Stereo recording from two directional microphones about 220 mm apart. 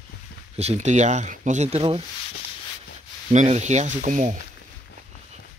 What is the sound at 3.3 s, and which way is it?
Speech, 30° right (ahead or behind).